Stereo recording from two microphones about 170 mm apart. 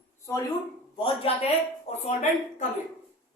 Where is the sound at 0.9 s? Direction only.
35° left (ahead or behind).